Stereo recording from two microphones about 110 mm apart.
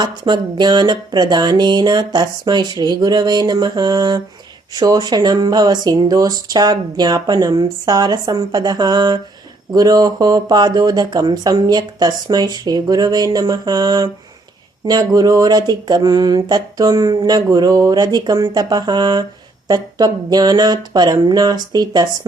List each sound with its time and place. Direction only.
0.0 s speech: 40° right (ahead or behind)